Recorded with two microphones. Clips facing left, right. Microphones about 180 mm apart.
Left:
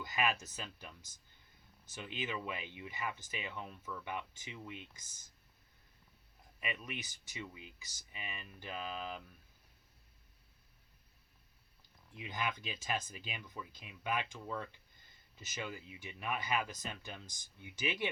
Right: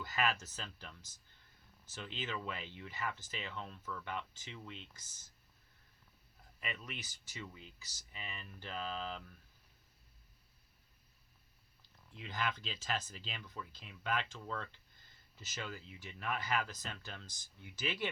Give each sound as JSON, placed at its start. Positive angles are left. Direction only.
{"t": 0.0, "sound": "speech", "side_deg": 15}
{"t": 6.6, "sound": "speech", "side_deg": 15}
{"t": 12.1, "sound": "speech", "side_deg": 15}